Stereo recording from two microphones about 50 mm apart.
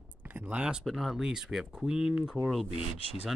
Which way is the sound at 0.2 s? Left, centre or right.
Right.